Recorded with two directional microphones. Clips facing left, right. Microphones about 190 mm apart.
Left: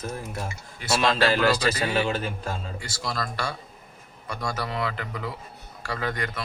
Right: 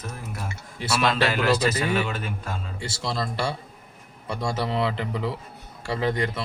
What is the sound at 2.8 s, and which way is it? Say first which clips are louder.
A man's voice: right 2 dB; 25° right (ahead or behind).